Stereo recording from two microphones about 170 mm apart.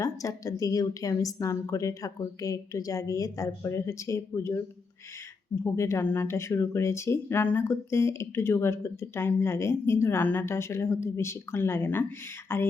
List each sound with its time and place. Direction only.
0.0 s a woman's voice: 20° left (ahead or behind)
5.6 s speech: 15° left (ahead or behind)